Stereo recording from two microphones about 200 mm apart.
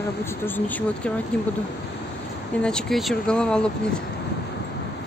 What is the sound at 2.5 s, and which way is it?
Speech, 5° left (ahead or behind).